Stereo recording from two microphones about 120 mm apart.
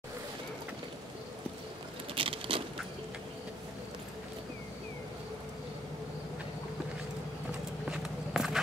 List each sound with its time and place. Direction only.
2.1 s patter: 50° right (ahead or behind)
7.9 s walk: 5° right (ahead or behind)